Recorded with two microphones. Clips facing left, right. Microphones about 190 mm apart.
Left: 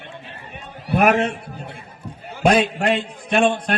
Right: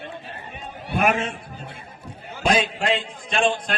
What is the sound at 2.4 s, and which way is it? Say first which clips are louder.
A man's voice: left 5 dB; 60° left (ahead or behind).